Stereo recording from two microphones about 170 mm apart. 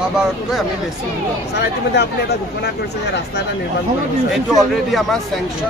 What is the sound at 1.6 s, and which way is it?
Speech, 80° left.